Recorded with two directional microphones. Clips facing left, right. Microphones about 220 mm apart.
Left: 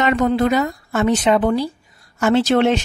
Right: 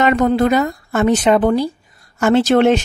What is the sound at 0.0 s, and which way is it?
Speech, 50° right (ahead or behind).